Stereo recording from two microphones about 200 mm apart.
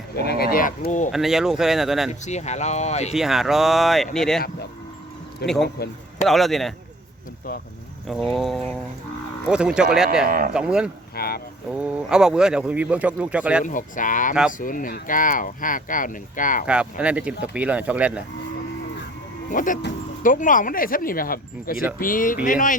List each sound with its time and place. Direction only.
0.2 s speech: 50° left (ahead or behind)
1.1 s speech: centre (ahead or behind)
2.2 s speech: 35° left (ahead or behind)
3.2 s speech: centre (ahead or behind)
5.4 s speech: 55° left (ahead or behind)
6.2 s speech: centre (ahead or behind)
8.0 s speech: centre (ahead or behind)
10.2 s speech: 45° right (ahead or behind)
10.5 s speech: 5° right (ahead or behind)
11.1 s a sound: 50° left (ahead or behind)
11.7 s speech: 5° right (ahead or behind)
13.7 s speech: 40° left (ahead or behind)
16.6 s speech: 5° right (ahead or behind)
19.5 s speech: 40° left (ahead or behind)